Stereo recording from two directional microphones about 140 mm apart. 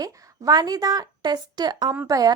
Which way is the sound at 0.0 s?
25° right (ahead or behind).